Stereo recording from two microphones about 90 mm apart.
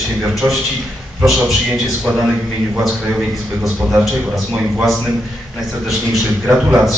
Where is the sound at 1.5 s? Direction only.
5° right (ahead or behind).